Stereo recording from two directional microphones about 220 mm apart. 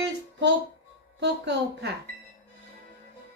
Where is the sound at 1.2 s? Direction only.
50° right (ahead or behind).